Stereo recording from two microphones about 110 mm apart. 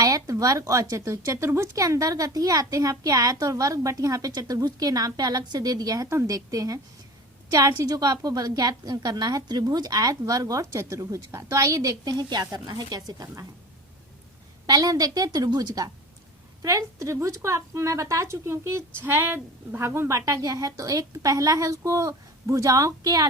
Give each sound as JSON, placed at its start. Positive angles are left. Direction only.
{"t": 0.0, "sound": "speech", "side_deg": -30}
{"t": 14.7, "sound": "a woman's voice", "side_deg": -35}